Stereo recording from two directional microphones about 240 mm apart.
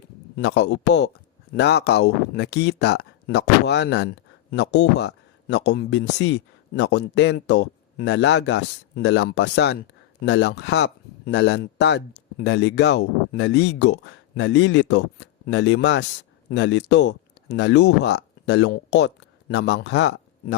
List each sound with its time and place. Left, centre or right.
0.3 s a man's voice: left